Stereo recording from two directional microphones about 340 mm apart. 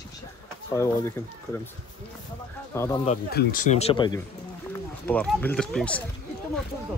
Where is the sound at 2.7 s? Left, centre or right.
Centre.